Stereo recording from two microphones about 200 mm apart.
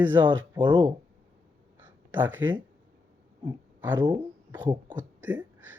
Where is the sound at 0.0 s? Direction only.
10° right (ahead or behind).